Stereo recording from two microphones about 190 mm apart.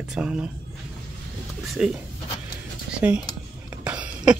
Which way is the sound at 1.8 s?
5° right (ahead or behind).